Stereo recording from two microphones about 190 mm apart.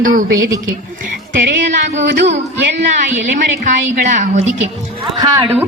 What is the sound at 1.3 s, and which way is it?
Music, 70° right (ahead or behind).